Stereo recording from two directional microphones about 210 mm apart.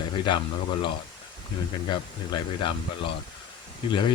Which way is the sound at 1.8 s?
20° left (ahead or behind).